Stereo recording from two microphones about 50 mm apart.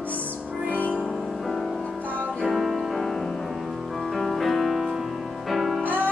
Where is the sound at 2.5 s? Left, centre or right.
Centre.